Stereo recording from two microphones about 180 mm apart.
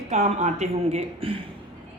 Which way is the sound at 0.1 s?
40° right (ahead or behind).